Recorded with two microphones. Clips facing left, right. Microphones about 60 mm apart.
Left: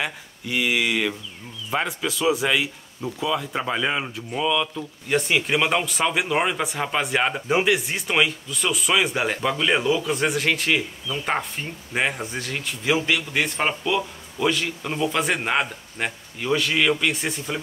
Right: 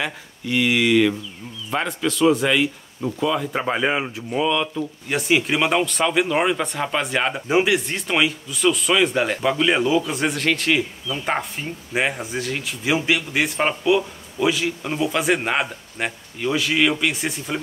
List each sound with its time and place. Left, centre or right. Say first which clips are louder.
0.0 s a man's voice: right 2 dB; centre
3.6 s a man's voice: right 3 dB; right; by 17.6 s centre